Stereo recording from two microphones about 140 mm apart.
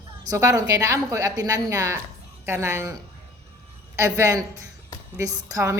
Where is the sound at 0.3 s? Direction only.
25° right (ahead or behind).